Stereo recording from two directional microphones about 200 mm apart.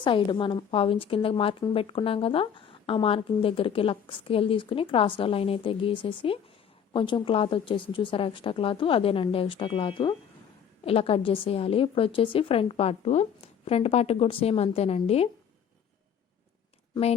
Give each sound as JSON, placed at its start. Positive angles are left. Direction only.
{"t": 0.0, "sound": "a woman's voice", "side_deg": 25}